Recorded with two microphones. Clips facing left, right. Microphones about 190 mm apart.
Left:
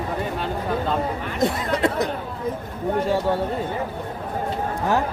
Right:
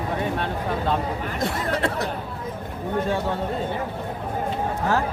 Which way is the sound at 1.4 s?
20° left (ahead or behind).